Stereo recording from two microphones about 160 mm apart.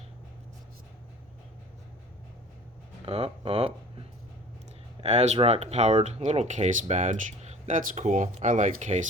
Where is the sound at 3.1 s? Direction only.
40° right (ahead or behind).